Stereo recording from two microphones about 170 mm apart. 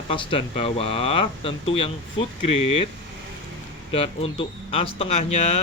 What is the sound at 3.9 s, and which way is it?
Speech, 35° left (ahead or behind).